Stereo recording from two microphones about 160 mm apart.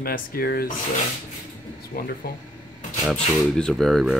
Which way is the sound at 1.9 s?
60° left (ahead or behind).